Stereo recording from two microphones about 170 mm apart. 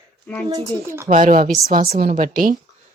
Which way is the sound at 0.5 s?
20° right (ahead or behind).